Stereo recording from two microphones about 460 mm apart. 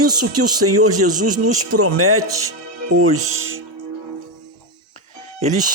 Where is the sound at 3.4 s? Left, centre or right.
Right.